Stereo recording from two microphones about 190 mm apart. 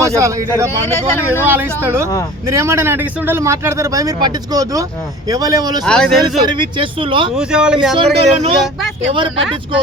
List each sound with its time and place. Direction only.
0.0 s speech: 15° right (ahead or behind)
1.5 s speech: 10° right (ahead or behind)
5.8 s speech: 5° left (ahead or behind)
6.2 s speech: 25° right (ahead or behind)
7.3 s speech: 5° right (ahead or behind)
7.9 s speech: 30° right (ahead or behind)